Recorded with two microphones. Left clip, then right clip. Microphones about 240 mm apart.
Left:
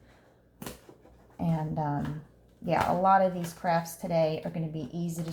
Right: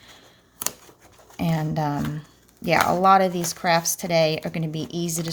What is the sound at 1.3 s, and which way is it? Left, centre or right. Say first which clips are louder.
Speech: right 6 dB; right.